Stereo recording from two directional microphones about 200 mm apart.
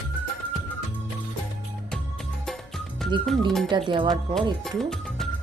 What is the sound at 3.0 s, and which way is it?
Music, centre (ahead or behind).